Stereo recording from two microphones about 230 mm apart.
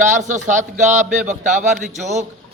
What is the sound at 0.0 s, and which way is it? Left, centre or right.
A man's voice, right.